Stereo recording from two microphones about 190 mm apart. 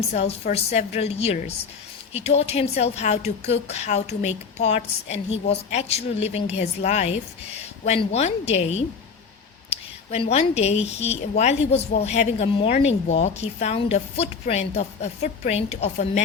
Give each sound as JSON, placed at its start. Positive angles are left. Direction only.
{"t": 0.1, "sound": "a woman's voice", "side_deg": 35}